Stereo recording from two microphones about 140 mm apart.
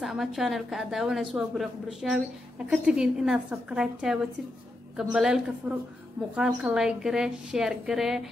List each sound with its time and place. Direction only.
0.0 s a woman's voice: 5° right (ahead or behind)
5.6 s a woman's voice: 15° right (ahead or behind)
6.3 s a woman's voice: 5° right (ahead or behind)